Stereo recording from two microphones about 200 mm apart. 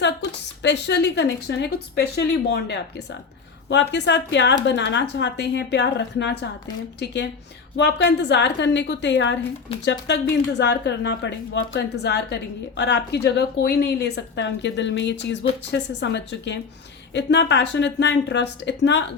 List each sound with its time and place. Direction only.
0.6 s a woman's voice: 60° left (ahead or behind)